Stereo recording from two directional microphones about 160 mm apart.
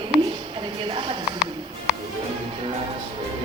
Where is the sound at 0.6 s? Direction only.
30° right (ahead or behind).